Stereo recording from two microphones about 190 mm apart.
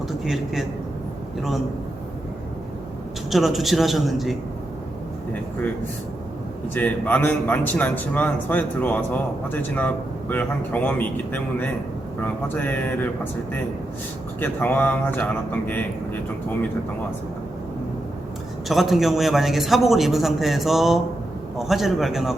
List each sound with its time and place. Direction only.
3.2 s a man's voice: centre (ahead or behind)
6.7 s a man's voice: 10° left (ahead or behind)
14.4 s a man's voice: 10° left (ahead or behind)
18.7 s a man's voice: centre (ahead or behind)